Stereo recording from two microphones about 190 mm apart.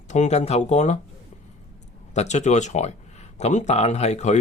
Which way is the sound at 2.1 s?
35° left (ahead or behind).